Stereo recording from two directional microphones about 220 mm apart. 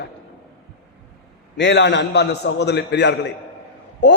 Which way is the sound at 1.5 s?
55° left (ahead or behind).